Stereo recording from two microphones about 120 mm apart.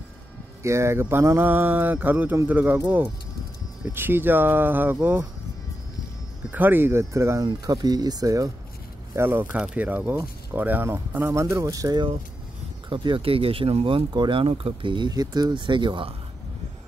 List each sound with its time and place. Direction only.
0.6 s speech: 25° right (ahead or behind)
6.5 s speech: 15° right (ahead or behind)
7.4 s speech: 35° right (ahead or behind)
9.1 s speech: 20° right (ahead or behind)
12.9 s speech: 45° right (ahead or behind)